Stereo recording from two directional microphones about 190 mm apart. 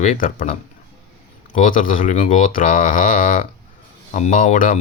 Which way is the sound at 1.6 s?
45° left (ahead or behind).